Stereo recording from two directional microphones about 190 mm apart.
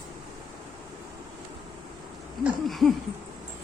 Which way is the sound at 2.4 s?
Centre (ahead or behind).